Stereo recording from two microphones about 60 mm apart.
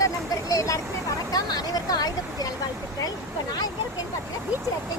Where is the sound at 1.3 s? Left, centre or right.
Left.